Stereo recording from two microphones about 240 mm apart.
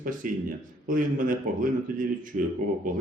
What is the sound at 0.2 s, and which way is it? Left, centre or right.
Speech, right.